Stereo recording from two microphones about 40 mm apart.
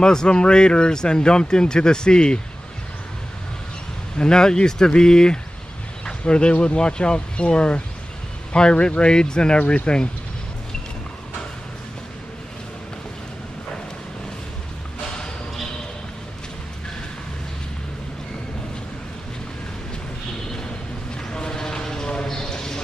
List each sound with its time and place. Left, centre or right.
0.0 s speech: centre
4.2 s speech: centre
21.3 s a sound: centre